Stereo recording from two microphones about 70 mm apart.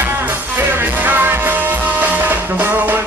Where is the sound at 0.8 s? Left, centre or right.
Right.